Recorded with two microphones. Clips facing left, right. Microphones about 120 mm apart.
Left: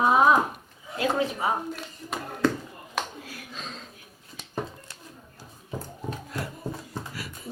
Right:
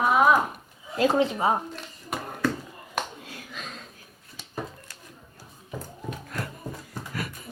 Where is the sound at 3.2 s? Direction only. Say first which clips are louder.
Even; 25° right (ahead or behind).